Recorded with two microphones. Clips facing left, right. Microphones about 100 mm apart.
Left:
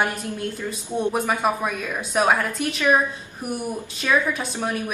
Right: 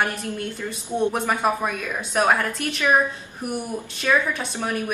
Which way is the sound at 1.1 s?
5° left (ahead or behind).